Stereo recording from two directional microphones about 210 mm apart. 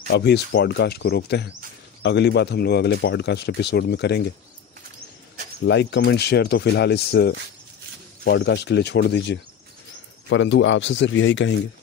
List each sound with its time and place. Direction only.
0.1 s speech: 55° left (ahead or behind)
5.6 s a man's voice: 55° left (ahead or behind)